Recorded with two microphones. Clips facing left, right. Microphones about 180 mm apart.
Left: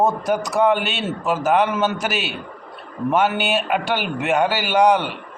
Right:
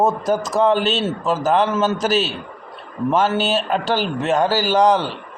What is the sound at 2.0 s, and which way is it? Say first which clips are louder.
Speech: right 6 dB; 40° right (ahead or behind).